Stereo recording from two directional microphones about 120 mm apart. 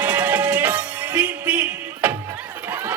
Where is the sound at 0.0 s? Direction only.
15° right (ahead or behind).